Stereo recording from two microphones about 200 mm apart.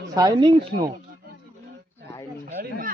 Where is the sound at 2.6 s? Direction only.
45° right (ahead or behind).